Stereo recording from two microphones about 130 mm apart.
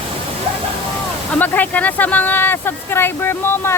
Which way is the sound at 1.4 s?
15° left (ahead or behind).